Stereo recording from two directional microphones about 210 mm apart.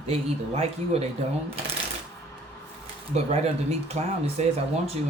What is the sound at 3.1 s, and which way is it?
Speech, 30° right (ahead or behind).